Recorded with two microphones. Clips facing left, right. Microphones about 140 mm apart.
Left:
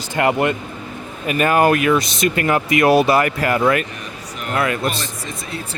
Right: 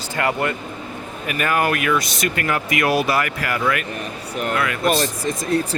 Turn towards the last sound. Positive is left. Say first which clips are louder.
# right 9 dB
turn(degrees=-40)  # may be behind; listen again after turning